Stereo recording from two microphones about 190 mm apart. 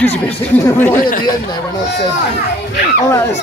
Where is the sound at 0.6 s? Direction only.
10° left (ahead or behind).